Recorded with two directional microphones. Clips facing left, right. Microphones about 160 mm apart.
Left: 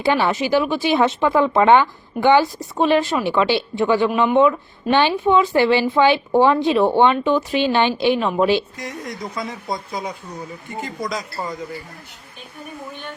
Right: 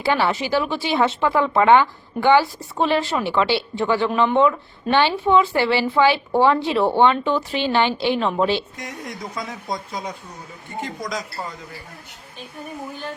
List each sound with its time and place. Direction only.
0.0 s a woman's voice: 15° left (ahead or behind); by 10.0 s centre (ahead or behind)